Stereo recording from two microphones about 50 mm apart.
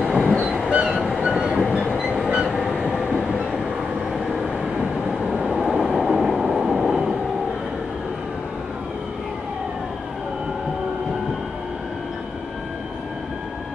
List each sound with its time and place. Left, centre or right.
0.0 s train: centre
3.1 s train: centre
5.7 s train: centre